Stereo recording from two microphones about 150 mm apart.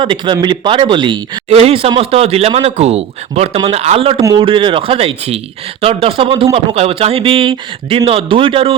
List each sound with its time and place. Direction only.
0.0 s speech: 30° right (ahead or behind)